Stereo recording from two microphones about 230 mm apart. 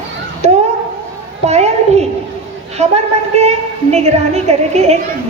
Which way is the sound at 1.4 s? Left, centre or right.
Right.